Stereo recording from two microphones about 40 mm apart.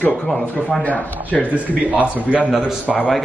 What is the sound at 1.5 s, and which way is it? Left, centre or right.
A man's voice, right.